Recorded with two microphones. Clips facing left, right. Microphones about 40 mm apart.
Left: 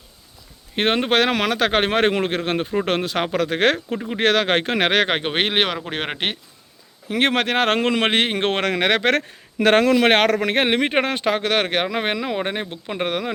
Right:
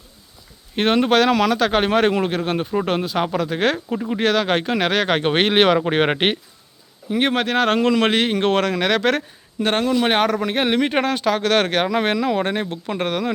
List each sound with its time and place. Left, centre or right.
0.8 s speech: left
2.8 s speech: left
5.2 s speech: centre
5.9 s speech: centre
7.1 s speech: left
9.6 s speech: left
10.1 s speech: left
10.7 s speech: left
11.5 s speech: centre